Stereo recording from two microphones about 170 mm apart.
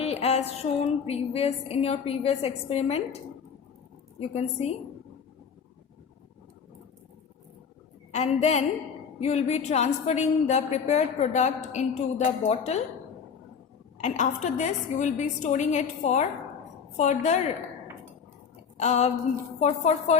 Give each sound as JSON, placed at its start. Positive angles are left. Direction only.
{"t": 0.0, "sound": "music", "side_deg": 40}
{"t": 4.2, "sound": "music", "side_deg": 40}
{"t": 8.1, "sound": "music", "side_deg": 40}
{"t": 9.2, "sound": "a woman's voice", "side_deg": 40}
{"t": 14.0, "sound": "a woman's voice", "side_deg": 45}
{"t": 18.8, "sound": "music", "side_deg": 40}